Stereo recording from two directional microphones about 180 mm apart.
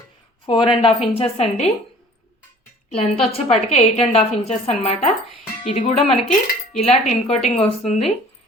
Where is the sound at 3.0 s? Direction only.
35° left (ahead or behind).